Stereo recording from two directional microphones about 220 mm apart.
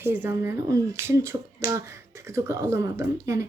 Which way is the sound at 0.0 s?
10° right (ahead or behind).